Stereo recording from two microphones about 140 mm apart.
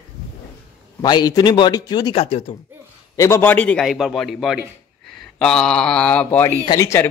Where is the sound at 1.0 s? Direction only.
30° left (ahead or behind).